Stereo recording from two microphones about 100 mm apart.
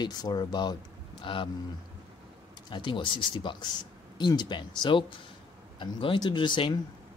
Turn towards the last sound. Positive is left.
turn(degrees=55)  # may be behind; listen again after turning